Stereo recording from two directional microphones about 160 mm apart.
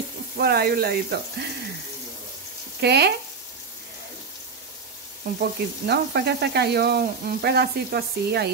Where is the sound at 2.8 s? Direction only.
90° right.